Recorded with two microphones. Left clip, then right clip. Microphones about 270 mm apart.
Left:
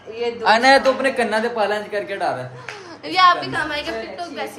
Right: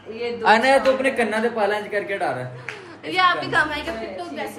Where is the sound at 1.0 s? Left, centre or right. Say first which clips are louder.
Left 2 dB; centre.